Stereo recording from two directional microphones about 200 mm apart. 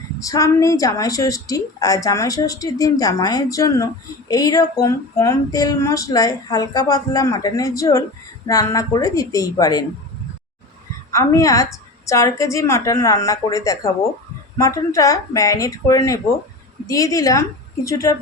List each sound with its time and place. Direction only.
0.2 s speech: 15° left (ahead or behind)
11.1 s speech: 15° left (ahead or behind)